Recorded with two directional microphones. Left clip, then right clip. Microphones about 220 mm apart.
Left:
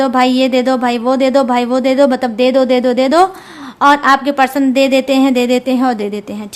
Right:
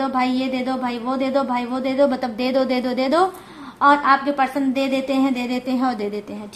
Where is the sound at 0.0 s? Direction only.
40° left (ahead or behind).